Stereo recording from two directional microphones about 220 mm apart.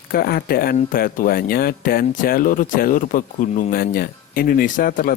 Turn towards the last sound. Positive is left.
turn(degrees=40)  # may be behind; listen again after turning